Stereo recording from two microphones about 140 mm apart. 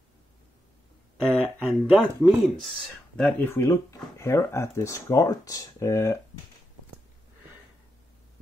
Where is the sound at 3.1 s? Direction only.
10° left (ahead or behind).